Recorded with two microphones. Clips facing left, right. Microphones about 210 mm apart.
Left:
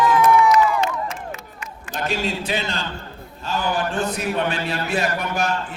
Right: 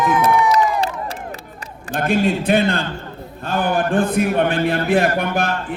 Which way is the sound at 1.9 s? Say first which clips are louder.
Right 7 dB; 55° right (ahead or behind).